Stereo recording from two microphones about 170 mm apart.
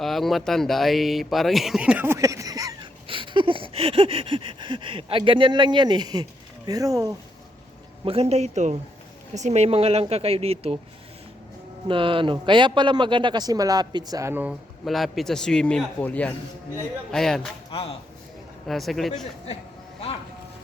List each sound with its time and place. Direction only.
0.0 s a man's voice: centre (ahead or behind); by 7.1 s 20° right (ahead or behind)
8.0 s speech: 35° right (ahead or behind)
11.9 s a man's voice: 30° right (ahead or behind); by 14.5 s 15° right (ahead or behind)
14.8 s a man's voice: centre (ahead or behind)
17.7 s speech: 30° left (ahead or behind)
18.7 s a man's voice: centre (ahead or behind)